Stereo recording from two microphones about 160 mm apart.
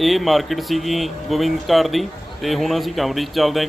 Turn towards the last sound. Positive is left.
turn(degrees=0)  # may be behind; listen again after turning